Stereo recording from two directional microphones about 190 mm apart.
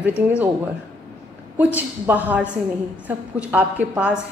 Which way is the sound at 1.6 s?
10° right (ahead or behind).